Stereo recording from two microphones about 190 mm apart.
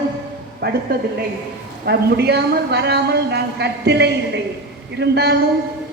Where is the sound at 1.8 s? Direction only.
60° right (ahead or behind).